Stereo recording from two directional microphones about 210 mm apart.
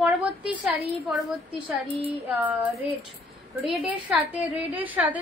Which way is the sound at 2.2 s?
10° right (ahead or behind).